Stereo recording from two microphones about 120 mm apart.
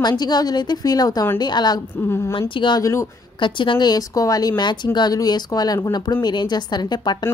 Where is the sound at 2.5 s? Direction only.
40° left (ahead or behind).